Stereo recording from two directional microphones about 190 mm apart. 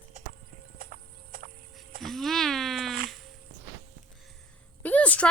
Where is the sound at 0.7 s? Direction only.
50° right (ahead or behind).